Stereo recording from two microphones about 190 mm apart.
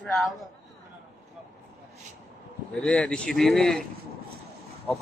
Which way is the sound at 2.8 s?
5° left (ahead or behind).